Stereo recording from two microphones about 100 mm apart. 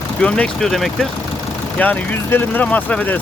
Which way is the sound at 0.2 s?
10° left (ahead or behind).